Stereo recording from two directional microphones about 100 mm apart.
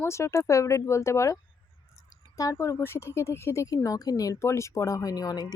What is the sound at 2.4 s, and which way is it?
Speech, 30° left (ahead or behind).